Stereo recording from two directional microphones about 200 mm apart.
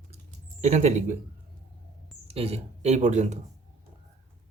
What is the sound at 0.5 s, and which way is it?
Speech, 35° right (ahead or behind).